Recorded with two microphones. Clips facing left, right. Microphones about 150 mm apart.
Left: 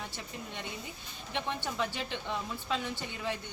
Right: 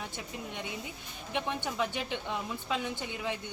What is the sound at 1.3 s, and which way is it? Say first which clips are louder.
Speech: right 2 dB; 10° right (ahead or behind).